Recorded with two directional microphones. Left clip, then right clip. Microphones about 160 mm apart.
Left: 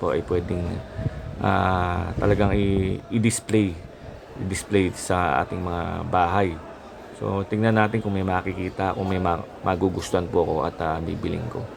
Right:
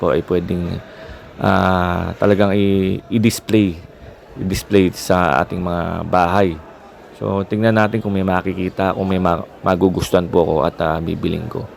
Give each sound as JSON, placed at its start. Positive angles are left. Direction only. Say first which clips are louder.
{"t": 0.0, "sound": "speech", "louder": "right 7 dB", "side_deg": -45}